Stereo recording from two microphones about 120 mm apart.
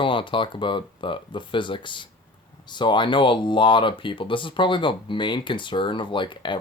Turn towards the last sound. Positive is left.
turn(degrees=40)  # may be behind; listen again after turning